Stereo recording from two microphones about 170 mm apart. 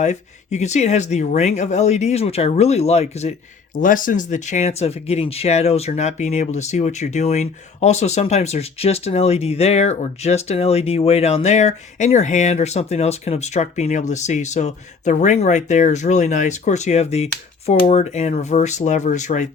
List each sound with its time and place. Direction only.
0.0 s speech: 45° left (ahead or behind)
3.8 s speech: 55° left (ahead or behind)